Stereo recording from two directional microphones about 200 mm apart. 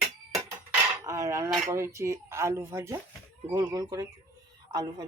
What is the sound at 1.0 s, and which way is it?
Speech, 15° right (ahead or behind).